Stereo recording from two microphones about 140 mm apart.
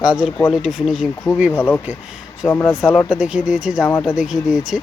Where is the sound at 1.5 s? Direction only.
10° left (ahead or behind).